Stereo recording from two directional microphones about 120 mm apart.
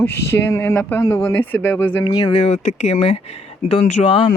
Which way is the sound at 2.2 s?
60° left (ahead or behind).